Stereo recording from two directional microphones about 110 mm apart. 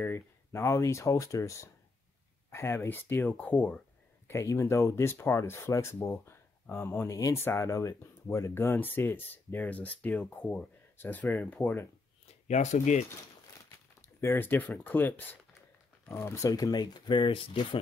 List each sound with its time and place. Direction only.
0.0 s speech: 25° left (ahead or behind)
4.3 s speech: 25° left (ahead or behind)
7.2 s speech: 30° left (ahead or behind)
12.4 s speech: 90° left
14.0 s speech: 25° left (ahead or behind); by 17.7 s 50° left (ahead or behind)